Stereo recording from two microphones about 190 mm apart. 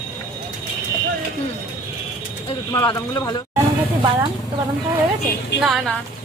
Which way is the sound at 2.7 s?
15° left (ahead or behind).